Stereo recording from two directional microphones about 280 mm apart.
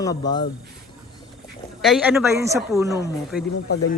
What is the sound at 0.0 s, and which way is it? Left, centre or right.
Speech, centre.